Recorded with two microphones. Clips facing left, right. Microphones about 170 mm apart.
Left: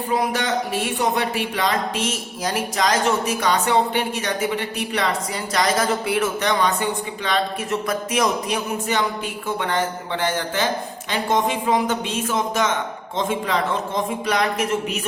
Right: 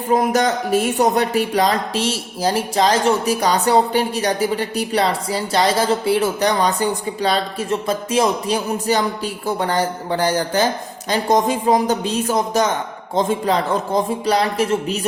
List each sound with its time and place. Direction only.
0.1 s speech: 45° right (ahead or behind)